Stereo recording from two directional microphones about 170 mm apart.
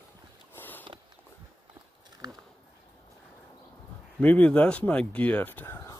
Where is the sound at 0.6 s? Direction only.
10° left (ahead or behind).